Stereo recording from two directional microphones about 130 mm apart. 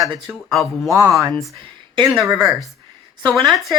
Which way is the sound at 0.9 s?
25° right (ahead or behind).